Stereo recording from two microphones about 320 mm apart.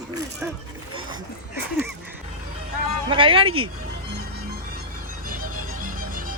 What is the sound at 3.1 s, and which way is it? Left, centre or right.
Speech, centre.